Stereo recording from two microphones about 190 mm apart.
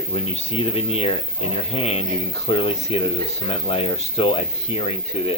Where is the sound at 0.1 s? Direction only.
30° left (ahead or behind).